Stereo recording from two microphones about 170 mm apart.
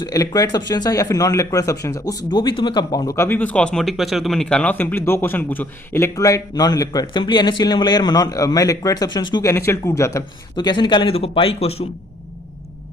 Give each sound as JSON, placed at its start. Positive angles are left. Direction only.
{"t": 0.0, "sound": "speech", "side_deg": 20}
{"t": 3.2, "sound": "speech", "side_deg": 10}